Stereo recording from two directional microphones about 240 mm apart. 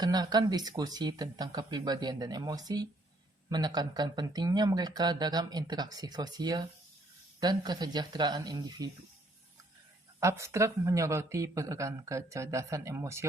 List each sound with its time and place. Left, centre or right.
0.0 s speech: centre
10.2 s speech: centre